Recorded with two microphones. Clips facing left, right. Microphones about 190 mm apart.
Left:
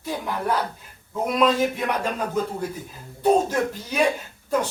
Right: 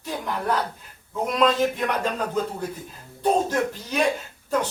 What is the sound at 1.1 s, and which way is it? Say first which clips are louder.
Speech: left 1 dB; 10° left (ahead or behind).